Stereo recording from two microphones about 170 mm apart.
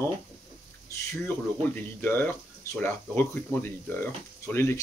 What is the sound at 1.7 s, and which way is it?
Speech, 10° left (ahead or behind).